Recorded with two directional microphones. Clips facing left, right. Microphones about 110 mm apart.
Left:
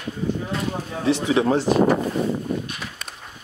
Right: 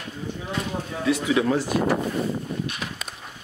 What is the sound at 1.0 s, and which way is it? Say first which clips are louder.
Speech: left 2 dB; 30° left (ahead or behind).